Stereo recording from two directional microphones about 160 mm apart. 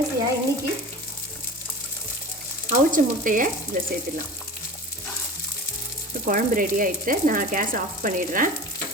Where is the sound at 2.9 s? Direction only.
55° right (ahead or behind).